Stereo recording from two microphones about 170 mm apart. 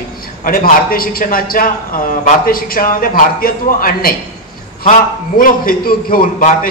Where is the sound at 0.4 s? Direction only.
55° left (ahead or behind).